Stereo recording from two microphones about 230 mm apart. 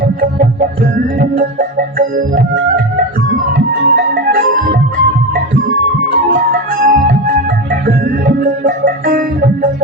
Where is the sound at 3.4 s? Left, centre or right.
Right.